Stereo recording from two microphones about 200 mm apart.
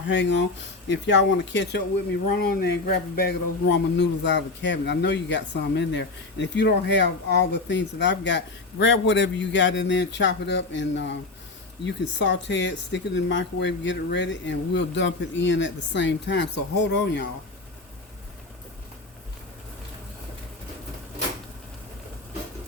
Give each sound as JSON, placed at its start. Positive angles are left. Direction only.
{"t": 0.0, "sound": "speech", "side_deg": 60}
{"t": 2.2, "sound": "speech", "side_deg": 40}
{"t": 3.7, "sound": "speech", "side_deg": 60}